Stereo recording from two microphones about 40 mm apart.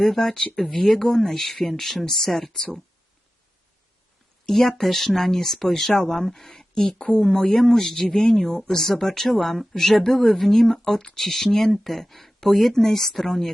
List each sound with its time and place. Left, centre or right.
0.0 s speech: centre
1.5 s speech: centre
1.8 s speech: centre
4.4 s speech: centre